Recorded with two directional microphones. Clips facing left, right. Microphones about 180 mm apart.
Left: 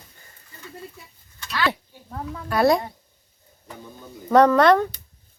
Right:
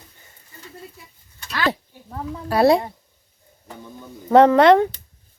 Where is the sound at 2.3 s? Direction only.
25° right (ahead or behind).